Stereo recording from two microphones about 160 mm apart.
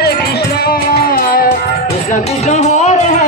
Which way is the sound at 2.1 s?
45° left (ahead or behind).